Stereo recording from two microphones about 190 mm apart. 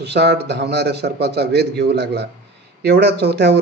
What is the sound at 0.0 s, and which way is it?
A man's voice, 60° right (ahead or behind).